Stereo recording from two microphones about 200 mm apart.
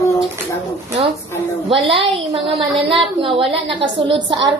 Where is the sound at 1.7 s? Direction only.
25° right (ahead or behind).